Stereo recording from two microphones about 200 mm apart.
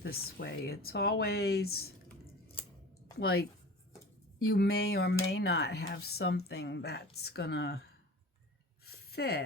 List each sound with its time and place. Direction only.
0.0 s speech: 50° left (ahead or behind)
3.2 s speech: 55° left (ahead or behind)
4.4 s speech: 55° left (ahead or behind)
8.8 s a sound: 50° left (ahead or behind)